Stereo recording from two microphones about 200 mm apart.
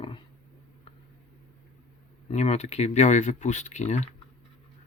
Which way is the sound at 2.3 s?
30° left (ahead or behind).